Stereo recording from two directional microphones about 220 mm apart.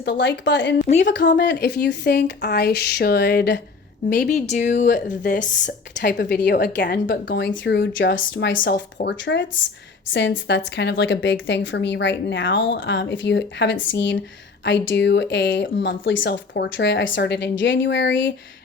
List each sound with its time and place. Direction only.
0.0 s a woman's voice: 50° left (ahead or behind)
0.9 s a woman's voice: 30° left (ahead or behind)
1.4 s a woman's voice: 50° left (ahead or behind)
4.4 s a woman's voice: 35° left (ahead or behind)
6.1 s a woman's voice: 50° left (ahead or behind)